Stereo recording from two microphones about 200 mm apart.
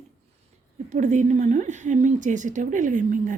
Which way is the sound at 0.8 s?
35° right (ahead or behind).